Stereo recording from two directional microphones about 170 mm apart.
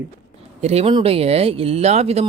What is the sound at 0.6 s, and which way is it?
Speech, 35° right (ahead or behind).